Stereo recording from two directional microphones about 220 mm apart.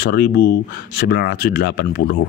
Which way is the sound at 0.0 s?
45° left (ahead or behind).